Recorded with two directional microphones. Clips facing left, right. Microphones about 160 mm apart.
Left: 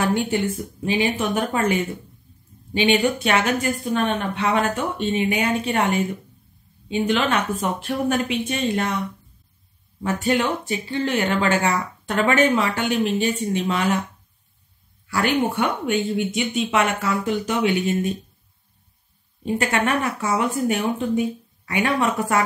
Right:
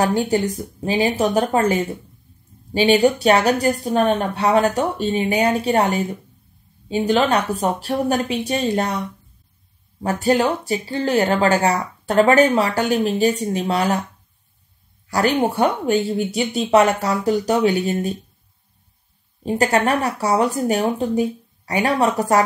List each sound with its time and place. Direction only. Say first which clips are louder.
0.0 s speech: right 3 dB; 40° right (ahead or behind)
10.0 s speech: right 4 dB; 35° right (ahead or behind)
15.0 s speech: right 3 dB; 40° right (ahead or behind)
19.4 s speech: right 4 dB; 35° right (ahead or behind)